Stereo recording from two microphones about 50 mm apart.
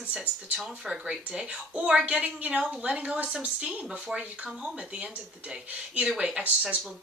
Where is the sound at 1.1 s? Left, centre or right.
Right.